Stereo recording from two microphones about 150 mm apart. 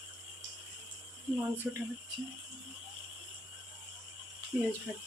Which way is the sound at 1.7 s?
5° right (ahead or behind).